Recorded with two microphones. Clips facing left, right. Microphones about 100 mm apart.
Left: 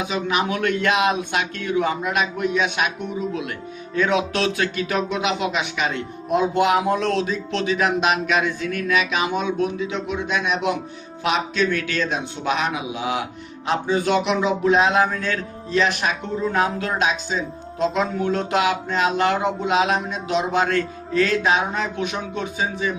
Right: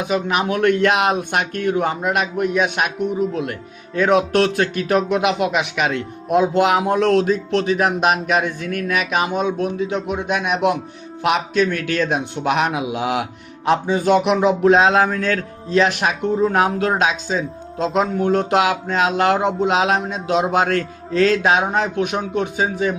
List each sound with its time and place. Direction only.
0.0 s speech: 50° right (ahead or behind)
13.7 s a man's voice: 50° right (ahead or behind)
18.9 s speech: 70° right (ahead or behind)